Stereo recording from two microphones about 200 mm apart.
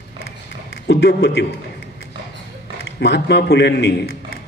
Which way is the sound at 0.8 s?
55° left (ahead or behind).